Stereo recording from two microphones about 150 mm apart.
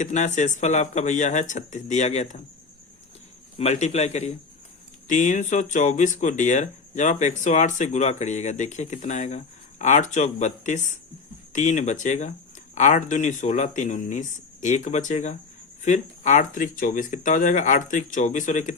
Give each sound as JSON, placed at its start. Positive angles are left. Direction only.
{"t": 0.0, "sound": "speech", "side_deg": 55}
{"t": 3.6, "sound": "speech", "side_deg": 50}